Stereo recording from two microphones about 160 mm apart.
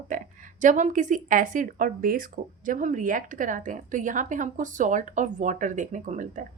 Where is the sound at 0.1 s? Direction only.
50° right (ahead or behind).